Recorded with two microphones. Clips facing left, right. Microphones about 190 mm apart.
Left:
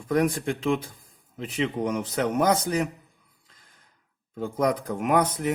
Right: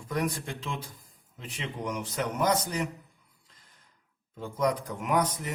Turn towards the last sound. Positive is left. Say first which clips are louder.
# left 5 dB
turn(degrees=60)  # may be behind; listen again after turning